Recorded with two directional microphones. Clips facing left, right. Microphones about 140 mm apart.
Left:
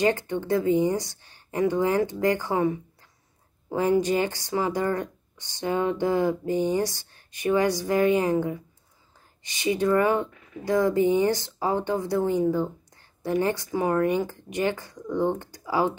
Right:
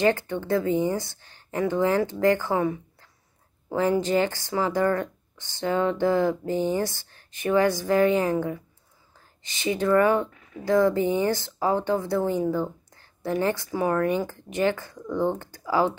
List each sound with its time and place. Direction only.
0.0 s speech: 15° left (ahead or behind)
4.0 s speech: 15° left (ahead or behind)